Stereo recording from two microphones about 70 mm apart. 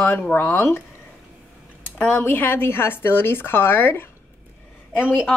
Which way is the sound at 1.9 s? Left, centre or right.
Left.